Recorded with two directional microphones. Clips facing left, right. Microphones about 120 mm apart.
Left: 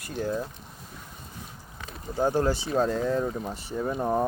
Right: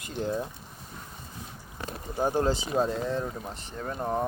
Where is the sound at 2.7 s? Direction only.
Centre (ahead or behind).